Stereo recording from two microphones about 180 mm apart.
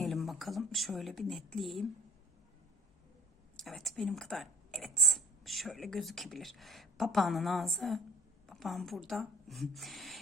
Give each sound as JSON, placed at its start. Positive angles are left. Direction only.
{"t": 0.0, "sound": "speech", "side_deg": 0}
{"t": 3.6, "sound": "speech", "side_deg": 0}